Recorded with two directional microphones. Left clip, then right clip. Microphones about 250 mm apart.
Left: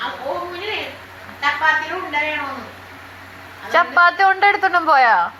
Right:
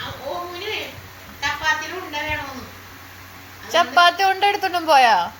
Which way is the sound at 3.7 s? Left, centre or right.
Right.